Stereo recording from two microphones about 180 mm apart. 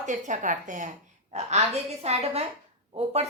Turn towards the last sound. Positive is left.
turn(degrees=-35)  # may be behind; listen again after turning